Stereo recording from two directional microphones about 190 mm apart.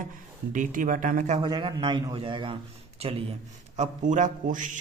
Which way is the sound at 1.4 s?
25° right (ahead or behind).